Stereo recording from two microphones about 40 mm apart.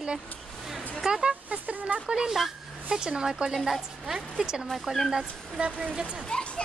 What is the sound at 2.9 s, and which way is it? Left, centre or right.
A woman's voice, centre.